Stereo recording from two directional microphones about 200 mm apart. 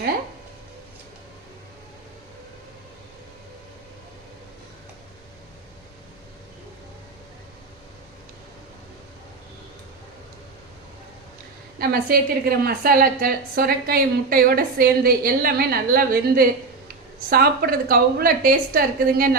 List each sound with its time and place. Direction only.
11.8 s a woman's voice: 50° right (ahead or behind)